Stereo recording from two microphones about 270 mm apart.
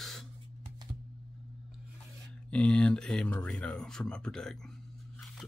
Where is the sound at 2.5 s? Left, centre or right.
Centre.